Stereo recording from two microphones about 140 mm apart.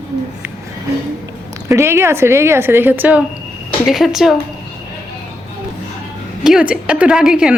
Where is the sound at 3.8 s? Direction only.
Centre (ahead or behind).